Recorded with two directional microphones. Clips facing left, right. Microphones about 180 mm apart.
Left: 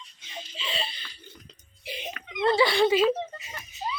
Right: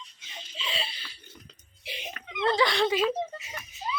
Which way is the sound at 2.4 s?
5° left (ahead or behind).